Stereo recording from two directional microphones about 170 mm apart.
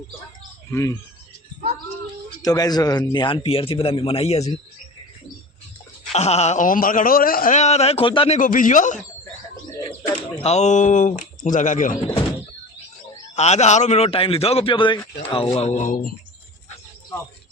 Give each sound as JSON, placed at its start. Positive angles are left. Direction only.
{"t": 0.7, "sound": "speech", "side_deg": 20}
{"t": 2.4, "sound": "a man's voice", "side_deg": 20}
{"t": 6.1, "sound": "a man's voice", "side_deg": 40}
{"t": 8.4, "sound": "speech", "side_deg": 50}
{"t": 10.4, "sound": "speech", "side_deg": 40}
{"t": 13.3, "sound": "a man's voice", "side_deg": 40}
{"t": 15.5, "sound": "speech", "side_deg": 40}